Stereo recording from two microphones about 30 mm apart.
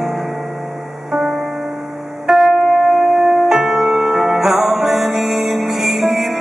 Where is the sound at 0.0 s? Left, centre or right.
Centre.